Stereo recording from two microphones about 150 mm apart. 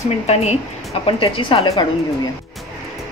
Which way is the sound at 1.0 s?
35° left (ahead or behind).